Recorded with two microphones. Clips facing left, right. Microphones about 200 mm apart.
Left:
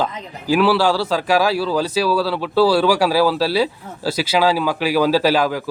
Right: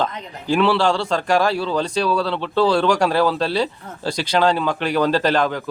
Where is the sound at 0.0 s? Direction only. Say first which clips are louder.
Left 1 dB; 5° left (ahead or behind).